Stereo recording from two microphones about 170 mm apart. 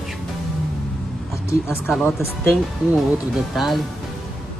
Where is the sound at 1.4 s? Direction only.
15° left (ahead or behind).